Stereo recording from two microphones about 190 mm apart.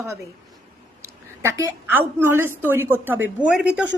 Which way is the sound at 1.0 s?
15° right (ahead or behind).